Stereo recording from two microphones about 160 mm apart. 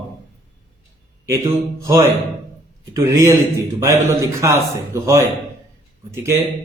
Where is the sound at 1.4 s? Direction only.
20° right (ahead or behind).